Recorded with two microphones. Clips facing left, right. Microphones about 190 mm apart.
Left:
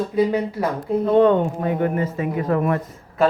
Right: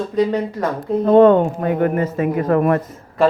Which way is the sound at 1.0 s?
50° right (ahead or behind).